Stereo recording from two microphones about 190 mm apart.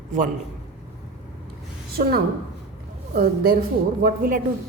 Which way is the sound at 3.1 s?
55° right (ahead or behind).